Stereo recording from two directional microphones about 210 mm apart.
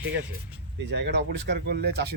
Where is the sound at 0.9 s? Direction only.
55° right (ahead or behind).